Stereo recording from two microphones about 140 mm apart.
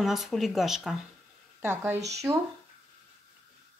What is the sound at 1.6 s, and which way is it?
Speech, 15° right (ahead or behind).